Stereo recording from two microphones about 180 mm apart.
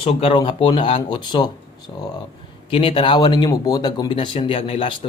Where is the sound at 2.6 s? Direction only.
30° left (ahead or behind).